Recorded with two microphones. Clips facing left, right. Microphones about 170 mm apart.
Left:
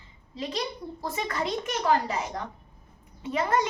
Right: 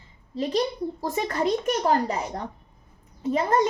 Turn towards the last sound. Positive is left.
turn(degrees=-35)  # may be behind; listen again after turning